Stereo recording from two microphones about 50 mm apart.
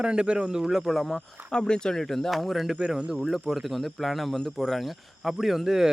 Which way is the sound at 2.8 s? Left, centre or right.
Centre.